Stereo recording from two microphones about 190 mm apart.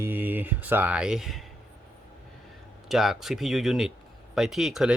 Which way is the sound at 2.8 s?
Centre (ahead or behind).